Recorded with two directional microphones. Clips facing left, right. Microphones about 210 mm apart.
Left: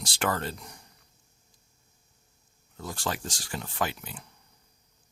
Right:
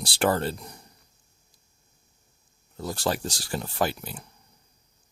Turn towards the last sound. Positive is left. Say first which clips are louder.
# right 5 dB
turn(degrees=-35)  # may be behind; listen again after turning